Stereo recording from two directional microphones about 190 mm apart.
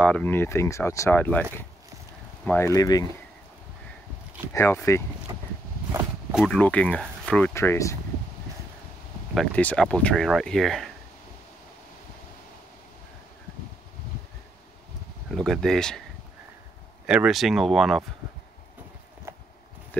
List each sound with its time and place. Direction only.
0.0 s speech: 10° left (ahead or behind)
2.4 s speech: 10° left (ahead or behind)
4.6 s speech: 10° left (ahead or behind)
5.3 s walk: 20° right (ahead or behind)
6.3 s speech: 5° left (ahead or behind)
9.3 s speech: 5° left (ahead or behind)
15.3 s speech: centre (ahead or behind)
17.0 s speech: 5° right (ahead or behind)
19.3 s a sound: 15° right (ahead or behind)